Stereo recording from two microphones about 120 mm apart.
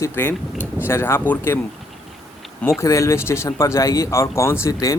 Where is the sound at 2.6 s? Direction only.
20° left (ahead or behind).